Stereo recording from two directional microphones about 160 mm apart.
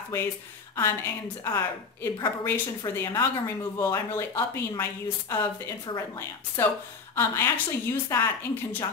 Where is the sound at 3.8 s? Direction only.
15° left (ahead or behind).